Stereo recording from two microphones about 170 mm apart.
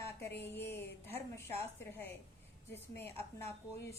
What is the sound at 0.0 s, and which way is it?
A woman's voice, 15° left (ahead or behind).